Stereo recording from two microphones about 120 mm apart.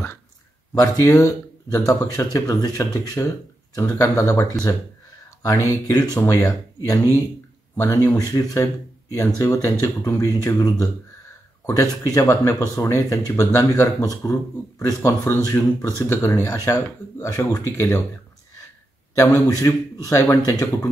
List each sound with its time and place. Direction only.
0.7 s speech: 25° left (ahead or behind)
19.1 s speech: 25° left (ahead or behind)